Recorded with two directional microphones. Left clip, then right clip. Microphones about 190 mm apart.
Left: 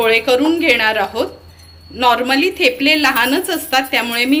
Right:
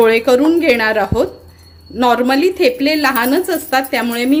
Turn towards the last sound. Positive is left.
turn(degrees=-35)  # may be behind; listen again after turning